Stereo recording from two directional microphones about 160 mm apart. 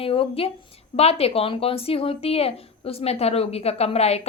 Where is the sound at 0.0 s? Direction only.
35° left (ahead or behind).